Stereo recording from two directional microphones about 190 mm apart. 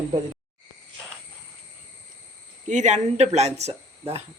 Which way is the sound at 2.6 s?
40° right (ahead or behind).